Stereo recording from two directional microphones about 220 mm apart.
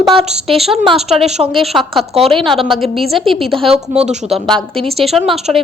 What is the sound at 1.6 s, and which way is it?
Speech, centre (ahead or behind).